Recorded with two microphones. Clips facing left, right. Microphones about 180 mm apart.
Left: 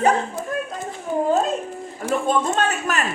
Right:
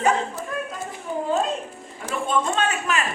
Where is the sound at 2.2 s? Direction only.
40° left (ahead or behind).